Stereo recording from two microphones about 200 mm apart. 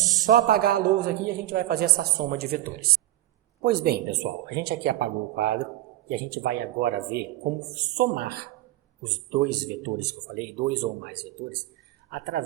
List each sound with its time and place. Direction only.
0.3 s a man's voice: 45° right (ahead or behind)